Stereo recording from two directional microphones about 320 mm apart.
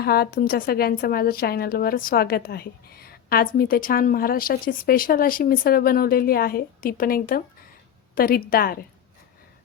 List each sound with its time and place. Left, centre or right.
0.0 s a woman's voice: left